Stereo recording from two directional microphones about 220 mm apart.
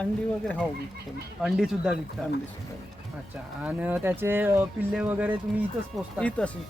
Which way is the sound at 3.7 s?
5° right (ahead or behind).